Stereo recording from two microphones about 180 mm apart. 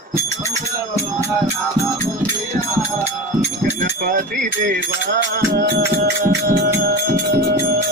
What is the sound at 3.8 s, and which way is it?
Music, 50° right (ahead or behind).